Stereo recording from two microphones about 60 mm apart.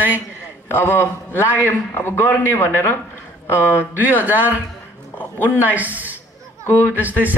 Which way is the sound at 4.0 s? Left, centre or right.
Right.